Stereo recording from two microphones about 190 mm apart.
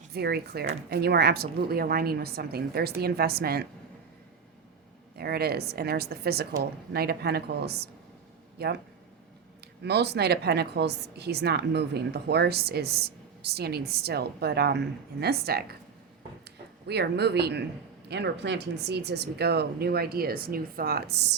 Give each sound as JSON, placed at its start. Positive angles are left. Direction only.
{"t": 0.1, "sound": "a woman's voice", "side_deg": -55}
{"t": 5.1, "sound": "a woman's voice", "side_deg": -55}
{"t": 9.8, "sound": "a woman's voice", "side_deg": -60}